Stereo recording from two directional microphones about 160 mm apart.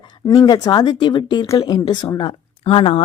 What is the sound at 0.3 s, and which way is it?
A woman's voice, 25° left (ahead or behind).